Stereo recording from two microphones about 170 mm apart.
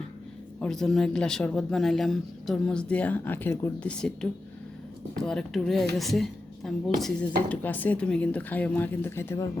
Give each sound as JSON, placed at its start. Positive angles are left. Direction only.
{"t": 0.6, "sound": "speech", "side_deg": 5}